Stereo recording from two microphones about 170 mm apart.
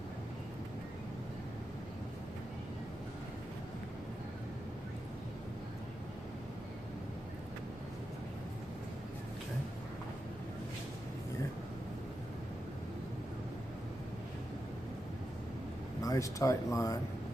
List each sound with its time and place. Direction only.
16.0 s speech: 20° left (ahead or behind)